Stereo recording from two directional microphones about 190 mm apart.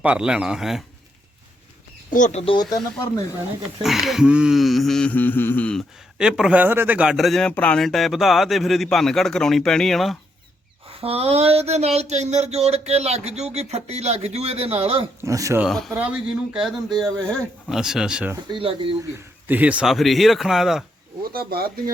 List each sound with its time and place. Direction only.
0.0 s speech: 5° right (ahead or behind)
2.1 s speech: 40° left (ahead or behind)
3.8 s speech: centre (ahead or behind)
6.1 s speech: 5° right (ahead or behind)
10.8 s a sound: 30° right (ahead or behind)
15.2 s speech: 15° right (ahead or behind)
15.6 s speech: centre (ahead or behind)
18.4 s speech: 25° right (ahead or behind)
19.1 s speech: 10° right (ahead or behind)
21.3 s speech: 50° right (ahead or behind)